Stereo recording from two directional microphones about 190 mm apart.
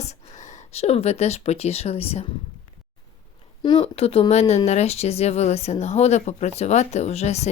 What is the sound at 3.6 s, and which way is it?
Speech, 25° left (ahead or behind).